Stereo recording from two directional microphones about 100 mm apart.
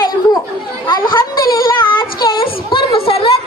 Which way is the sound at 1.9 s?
55° left (ahead or behind).